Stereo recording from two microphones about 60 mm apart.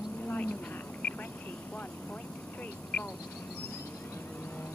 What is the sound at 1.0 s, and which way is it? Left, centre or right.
Vehicle, left.